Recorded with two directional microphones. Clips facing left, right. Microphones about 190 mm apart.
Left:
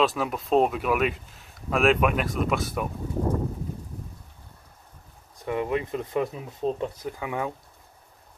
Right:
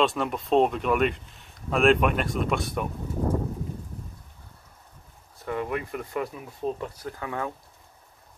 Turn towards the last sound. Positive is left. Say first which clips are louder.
# left 2 dB
turn(degrees=15)  # may be behind; listen again after turning